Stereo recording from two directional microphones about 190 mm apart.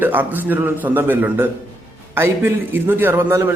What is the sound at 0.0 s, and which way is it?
A man's voice, 10° right (ahead or behind).